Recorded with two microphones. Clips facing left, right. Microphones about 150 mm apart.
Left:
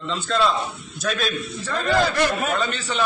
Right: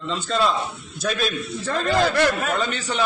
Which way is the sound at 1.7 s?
Centre (ahead or behind).